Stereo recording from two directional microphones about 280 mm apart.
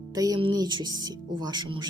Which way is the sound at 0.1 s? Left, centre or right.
Centre.